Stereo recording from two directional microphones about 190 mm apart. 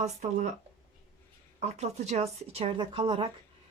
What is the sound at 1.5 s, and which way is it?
Speech, 35° right (ahead or behind).